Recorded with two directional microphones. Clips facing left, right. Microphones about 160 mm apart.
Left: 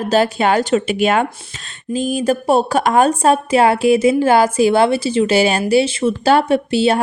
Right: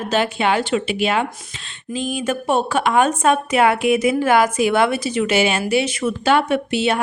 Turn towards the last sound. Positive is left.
turn(degrees=35)  # may be behind; listen again after turning